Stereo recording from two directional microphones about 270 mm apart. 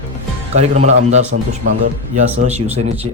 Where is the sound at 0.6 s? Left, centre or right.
Right.